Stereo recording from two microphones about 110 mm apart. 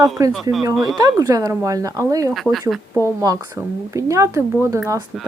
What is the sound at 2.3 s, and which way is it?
Speech, centre (ahead or behind).